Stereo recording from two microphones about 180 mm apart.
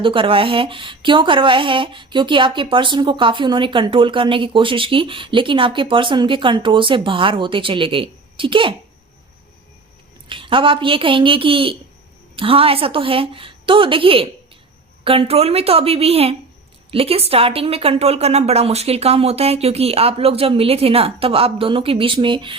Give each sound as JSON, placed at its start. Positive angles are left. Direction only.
{"t": 0.0, "sound": "speech", "side_deg": -30}
{"t": 10.2, "sound": "speech", "side_deg": -30}